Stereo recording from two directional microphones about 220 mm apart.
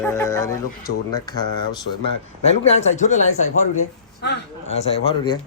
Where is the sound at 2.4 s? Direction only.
30° left (ahead or behind).